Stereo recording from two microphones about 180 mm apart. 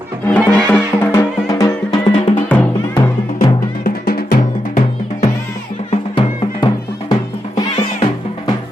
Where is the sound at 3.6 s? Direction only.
55° left (ahead or behind).